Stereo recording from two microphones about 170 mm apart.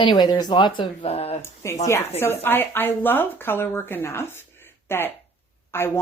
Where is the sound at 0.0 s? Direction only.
25° left (ahead or behind).